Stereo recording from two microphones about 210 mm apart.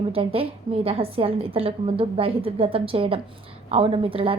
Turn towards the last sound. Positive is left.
turn(degrees=-25)  # may be behind; listen again after turning